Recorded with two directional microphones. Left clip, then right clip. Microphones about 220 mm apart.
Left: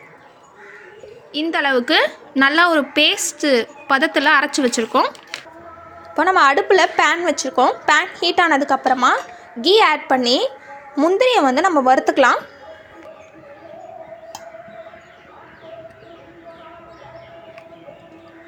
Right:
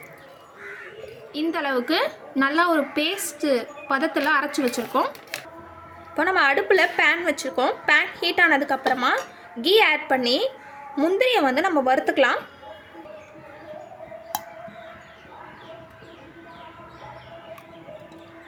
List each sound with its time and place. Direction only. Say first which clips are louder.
1.3 s a woman's voice: left 7 dB; 30° left (ahead or behind)
6.1 s a woman's voice: left 6 dB; 10° left (ahead or behind)